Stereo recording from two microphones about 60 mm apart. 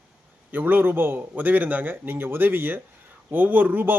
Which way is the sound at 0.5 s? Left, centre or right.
Right.